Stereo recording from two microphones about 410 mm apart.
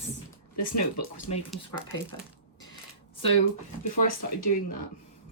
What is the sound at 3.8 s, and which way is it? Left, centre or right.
Speech, left.